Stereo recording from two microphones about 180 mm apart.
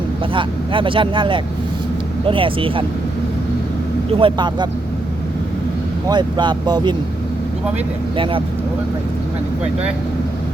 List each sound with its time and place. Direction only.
0.3 s speech: 30° right (ahead or behind)
4.2 s speech: 25° right (ahead or behind)
6.1 s speech: 25° right (ahead or behind)
8.1 s speech: 30° right (ahead or behind)